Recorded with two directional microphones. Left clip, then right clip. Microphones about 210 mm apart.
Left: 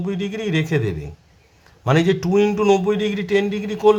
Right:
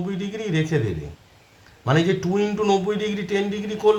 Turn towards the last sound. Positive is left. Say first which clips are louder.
# left 3 dB
turn(degrees=25)  # may be behind; listen again after turning